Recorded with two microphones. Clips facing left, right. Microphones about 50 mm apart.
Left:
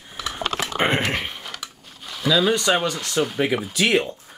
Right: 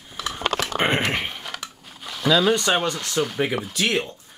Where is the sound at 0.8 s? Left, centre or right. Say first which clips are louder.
Left 1 dB; centre.